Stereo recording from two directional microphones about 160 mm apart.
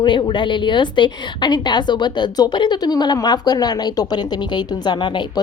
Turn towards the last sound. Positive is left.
turn(degrees=30)  # may be behind; listen again after turning